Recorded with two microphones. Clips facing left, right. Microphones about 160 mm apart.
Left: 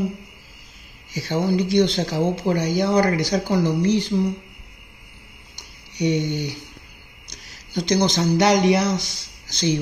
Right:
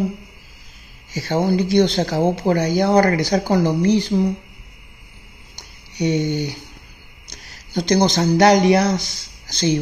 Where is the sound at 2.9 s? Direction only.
60° right (ahead or behind).